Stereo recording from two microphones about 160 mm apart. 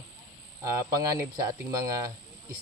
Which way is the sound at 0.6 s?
20° right (ahead or behind).